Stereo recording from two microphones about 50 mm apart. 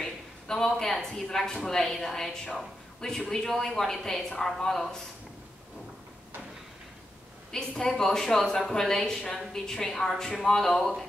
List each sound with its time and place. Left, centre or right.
0.0 s speech: centre
7.5 s speech: centre